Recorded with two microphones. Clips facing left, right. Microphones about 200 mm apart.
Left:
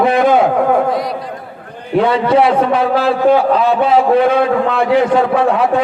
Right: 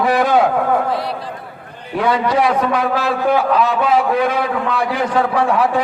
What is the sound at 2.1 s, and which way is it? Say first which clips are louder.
A man's voice: left 2 dB; 25° left (ahead or behind).